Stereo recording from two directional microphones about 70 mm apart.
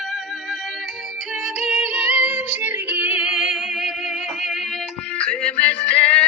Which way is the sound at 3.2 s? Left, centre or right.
Centre.